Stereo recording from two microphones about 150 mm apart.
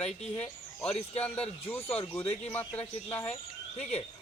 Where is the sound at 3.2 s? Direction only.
45° left (ahead or behind).